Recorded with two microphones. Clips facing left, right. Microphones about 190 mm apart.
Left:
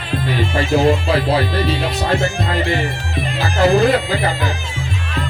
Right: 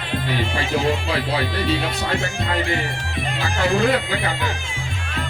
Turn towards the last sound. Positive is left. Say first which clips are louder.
# left 4 dB
turn(degrees=40)  # may be behind; listen again after turning